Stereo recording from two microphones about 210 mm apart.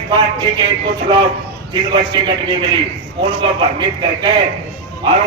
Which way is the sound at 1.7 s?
20° right (ahead or behind).